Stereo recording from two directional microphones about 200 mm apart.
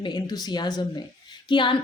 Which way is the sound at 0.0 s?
20° left (ahead or behind).